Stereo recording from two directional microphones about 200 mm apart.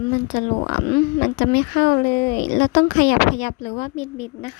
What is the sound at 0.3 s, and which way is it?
Speech, 50° left (ahead or behind).